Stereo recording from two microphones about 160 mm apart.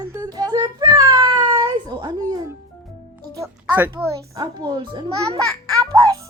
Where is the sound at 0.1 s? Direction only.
25° right (ahead or behind).